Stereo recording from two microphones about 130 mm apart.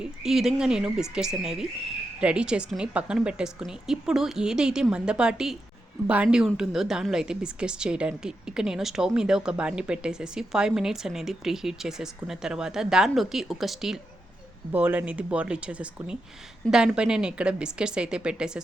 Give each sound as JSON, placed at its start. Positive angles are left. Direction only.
{"t": 0.0, "sound": "a woman's voice", "side_deg": -5}
{"t": 14.7, "sound": "a woman's voice", "side_deg": -15}